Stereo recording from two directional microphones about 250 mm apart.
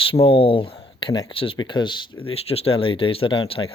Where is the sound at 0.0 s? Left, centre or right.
Left.